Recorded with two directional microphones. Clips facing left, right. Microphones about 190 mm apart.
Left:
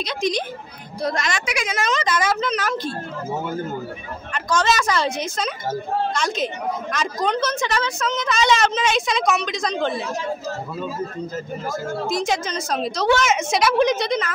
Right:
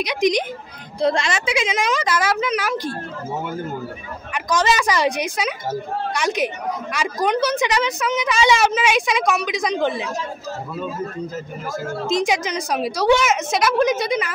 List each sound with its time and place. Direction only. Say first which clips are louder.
0.0 s a woman's voice: right 4 dB; 15° right (ahead or behind)
1.0 s a woman's voice: right 4 dB; 25° right (ahead or behind)
1.8 s a woman's voice: right 1 dB; 10° right (ahead or behind)
4.3 s a woman's voice: right 1 dB; 15° right (ahead or behind)
12.1 s a woman's voice: right 4 dB; 15° right (ahead or behind)